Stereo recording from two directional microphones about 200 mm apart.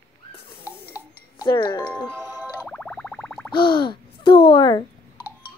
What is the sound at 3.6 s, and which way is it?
A child's voice, 25° left (ahead or behind).